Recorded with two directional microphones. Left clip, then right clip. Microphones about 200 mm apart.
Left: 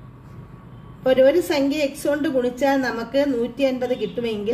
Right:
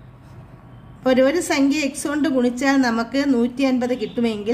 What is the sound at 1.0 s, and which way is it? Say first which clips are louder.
A woman's voice: left 1 dB; 40° right (ahead or behind).